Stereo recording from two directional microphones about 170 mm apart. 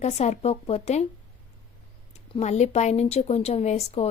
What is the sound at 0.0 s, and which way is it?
Speech, 40° left (ahead or behind).